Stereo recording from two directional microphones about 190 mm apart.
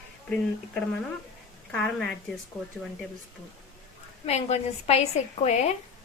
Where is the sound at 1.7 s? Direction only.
5° left (ahead or behind).